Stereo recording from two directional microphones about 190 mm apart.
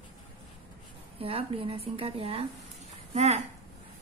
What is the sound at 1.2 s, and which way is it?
A woman's voice, 30° right (ahead or behind).